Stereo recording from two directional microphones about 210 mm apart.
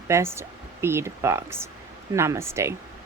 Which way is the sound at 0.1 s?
10° right (ahead or behind).